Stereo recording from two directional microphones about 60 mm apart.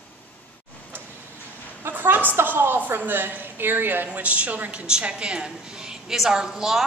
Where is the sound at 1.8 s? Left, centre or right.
Right.